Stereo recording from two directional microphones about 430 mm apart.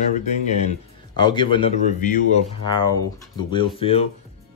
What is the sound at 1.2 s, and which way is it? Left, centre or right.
Speech, centre.